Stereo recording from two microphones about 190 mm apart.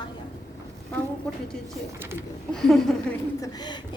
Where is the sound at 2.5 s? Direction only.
5° left (ahead or behind).